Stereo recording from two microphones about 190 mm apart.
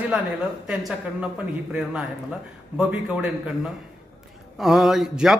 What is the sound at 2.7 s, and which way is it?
Speech, 5° right (ahead or behind).